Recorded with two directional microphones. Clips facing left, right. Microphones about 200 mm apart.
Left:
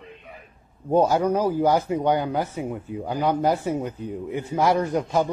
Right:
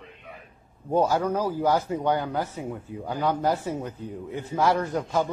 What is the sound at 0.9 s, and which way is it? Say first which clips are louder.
A man's voice: left 4 dB; 20° left (ahead or behind).